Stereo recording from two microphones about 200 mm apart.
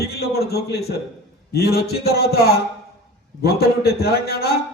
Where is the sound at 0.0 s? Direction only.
50° left (ahead or behind).